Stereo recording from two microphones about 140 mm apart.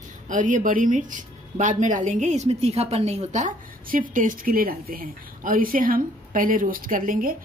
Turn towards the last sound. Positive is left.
turn(degrees=-80)